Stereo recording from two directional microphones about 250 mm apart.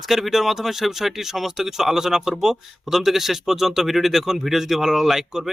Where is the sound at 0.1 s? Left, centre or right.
Centre.